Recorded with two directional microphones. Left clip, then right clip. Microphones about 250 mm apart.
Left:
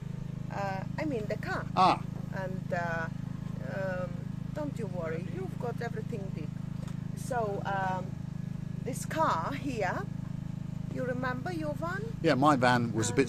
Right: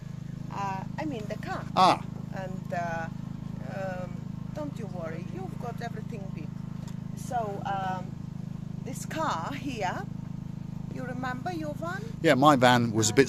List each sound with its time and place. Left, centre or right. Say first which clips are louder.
0.5 s a sound: right 2 dB; centre
1.7 s speech: right 3 dB; right
2.4 s vehicle: right 1 dB; centre
7.3 s vehicle: right 1 dB; centre
9.1 s speech: left 1 dB; centre
11.0 s speech: even; centre
12.2 s speech: right 5 dB; right